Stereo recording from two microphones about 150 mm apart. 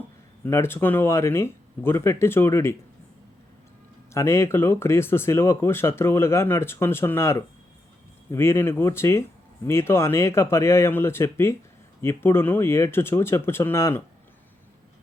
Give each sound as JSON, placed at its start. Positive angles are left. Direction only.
{"t": 0.4, "sound": "speech", "side_deg": 15}
{"t": 4.1, "sound": "speech", "side_deg": 20}